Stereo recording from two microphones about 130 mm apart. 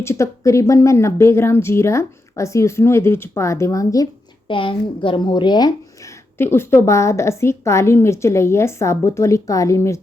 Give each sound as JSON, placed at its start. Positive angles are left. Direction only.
{"t": 0.0, "sound": "speech", "side_deg": 20}
{"t": 4.4, "sound": "speech", "side_deg": 40}
{"t": 6.3, "sound": "speech", "side_deg": 20}